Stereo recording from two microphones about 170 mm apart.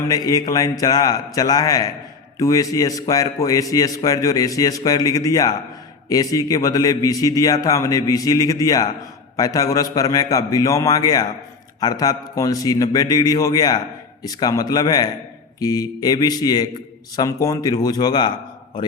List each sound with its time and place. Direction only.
0.1 s a man's voice: 20° left (ahead or behind)